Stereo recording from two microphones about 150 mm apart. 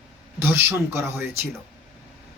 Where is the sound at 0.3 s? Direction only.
15° right (ahead or behind).